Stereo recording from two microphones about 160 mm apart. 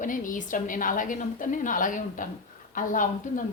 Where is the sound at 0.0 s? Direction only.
55° left (ahead or behind).